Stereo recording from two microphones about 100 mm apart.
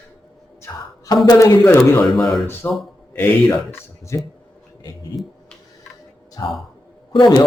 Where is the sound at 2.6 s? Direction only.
25° left (ahead or behind).